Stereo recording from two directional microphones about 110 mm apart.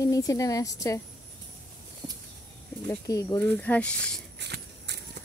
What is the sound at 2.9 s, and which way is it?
Speech, 30° left (ahead or behind).